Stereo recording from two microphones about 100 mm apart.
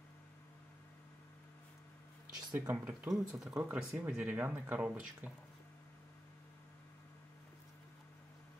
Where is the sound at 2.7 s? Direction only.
20° right (ahead or behind).